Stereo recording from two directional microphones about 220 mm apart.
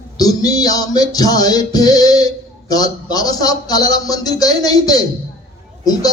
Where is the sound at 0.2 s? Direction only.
15° left (ahead or behind).